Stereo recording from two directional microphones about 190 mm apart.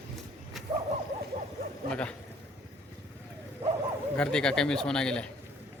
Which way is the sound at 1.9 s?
5° left (ahead or behind).